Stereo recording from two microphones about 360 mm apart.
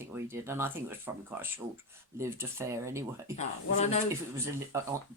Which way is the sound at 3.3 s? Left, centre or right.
Centre.